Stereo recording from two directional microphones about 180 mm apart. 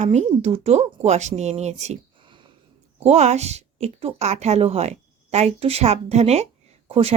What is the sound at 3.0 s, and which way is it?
Speech, 40° right (ahead or behind).